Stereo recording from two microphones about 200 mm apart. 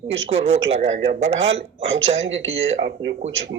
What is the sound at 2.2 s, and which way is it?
Speech, 70° right (ahead or behind).